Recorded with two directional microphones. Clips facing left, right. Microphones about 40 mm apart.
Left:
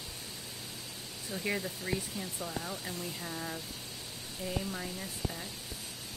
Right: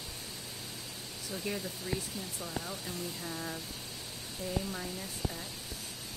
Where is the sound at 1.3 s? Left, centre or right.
Centre.